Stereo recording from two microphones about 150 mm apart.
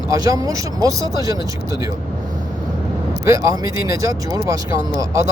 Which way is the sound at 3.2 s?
20° right (ahead or behind).